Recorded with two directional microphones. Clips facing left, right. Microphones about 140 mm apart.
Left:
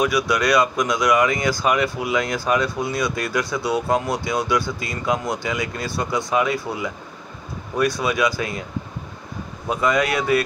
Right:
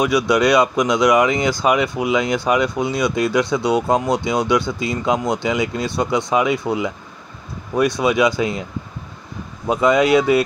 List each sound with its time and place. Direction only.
0.0 s speech: 20° right (ahead or behind)
8.0 s speech: 20° right (ahead or behind)
9.7 s speech: 20° right (ahead or behind)